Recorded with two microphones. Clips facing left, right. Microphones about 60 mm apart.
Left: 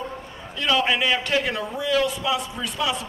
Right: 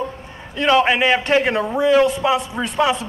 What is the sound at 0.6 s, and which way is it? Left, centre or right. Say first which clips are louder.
A man's voice: right 6 dB; right.